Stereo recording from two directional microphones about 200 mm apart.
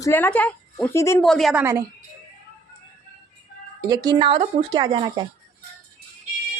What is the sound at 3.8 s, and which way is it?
Speech, 20° right (ahead or behind).